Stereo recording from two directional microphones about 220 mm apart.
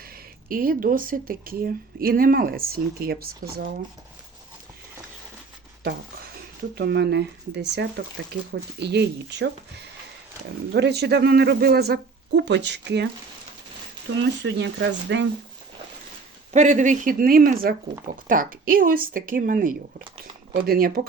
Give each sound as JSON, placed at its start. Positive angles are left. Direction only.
{"t": 0.4, "sound": "speech", "side_deg": -40}
{"t": 6.7, "sound": "speech", "side_deg": -50}
{"t": 10.8, "sound": "speech", "side_deg": -50}
{"t": 14.1, "sound": "speech", "side_deg": -60}
{"t": 16.5, "sound": "speech", "side_deg": -35}